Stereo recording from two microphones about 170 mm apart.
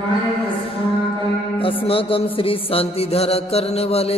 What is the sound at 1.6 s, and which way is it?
A man's voice, 30° left (ahead or behind).